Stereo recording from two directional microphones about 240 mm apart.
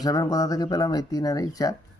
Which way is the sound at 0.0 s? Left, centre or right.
Centre.